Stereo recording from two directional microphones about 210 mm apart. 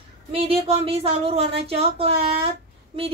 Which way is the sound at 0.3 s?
25° right (ahead or behind).